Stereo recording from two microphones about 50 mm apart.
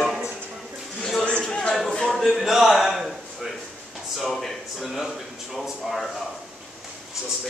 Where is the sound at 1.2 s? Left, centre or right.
Left.